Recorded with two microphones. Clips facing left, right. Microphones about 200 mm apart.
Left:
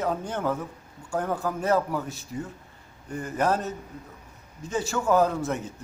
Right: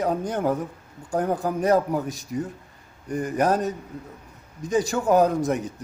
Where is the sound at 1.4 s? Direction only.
15° right (ahead or behind).